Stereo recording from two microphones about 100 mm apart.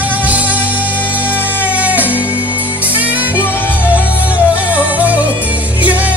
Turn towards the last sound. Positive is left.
turn(degrees=-15)  # may be behind; listen again after turning